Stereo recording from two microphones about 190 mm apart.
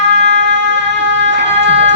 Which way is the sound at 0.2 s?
70° right (ahead or behind).